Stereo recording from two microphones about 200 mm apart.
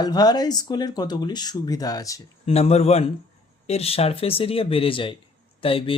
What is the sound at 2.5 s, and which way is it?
Speech, 30° left (ahead or behind).